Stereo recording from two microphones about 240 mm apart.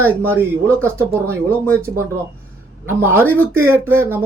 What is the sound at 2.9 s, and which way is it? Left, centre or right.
Speech, centre.